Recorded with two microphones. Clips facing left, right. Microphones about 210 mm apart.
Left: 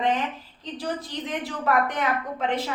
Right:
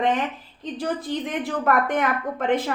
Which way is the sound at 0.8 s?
50° right (ahead or behind).